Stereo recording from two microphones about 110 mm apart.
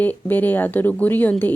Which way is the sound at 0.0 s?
15° left (ahead or behind).